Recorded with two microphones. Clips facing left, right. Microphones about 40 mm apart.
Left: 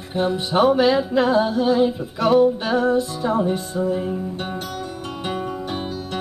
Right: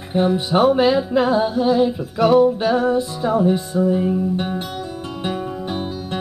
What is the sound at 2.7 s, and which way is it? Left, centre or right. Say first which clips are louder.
Female singing: right 1 dB; right.